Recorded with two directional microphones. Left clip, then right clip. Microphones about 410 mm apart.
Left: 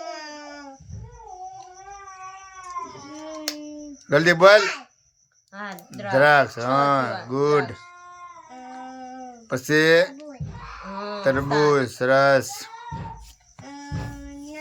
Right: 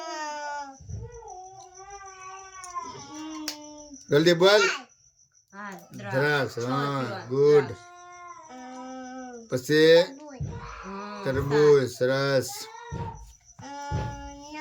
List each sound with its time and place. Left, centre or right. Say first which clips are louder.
4.1 s speech: left 5 dB; centre
5.5 s a sound: left 5 dB; centre
6.1 s speech: left 9 dB; centre
9.5 s speech: left 1 dB; centre
11.2 s speech: left 3 dB; centre